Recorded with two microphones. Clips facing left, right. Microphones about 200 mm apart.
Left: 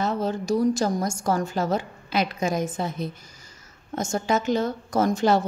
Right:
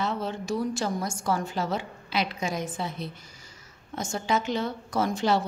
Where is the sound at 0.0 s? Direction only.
40° left (ahead or behind).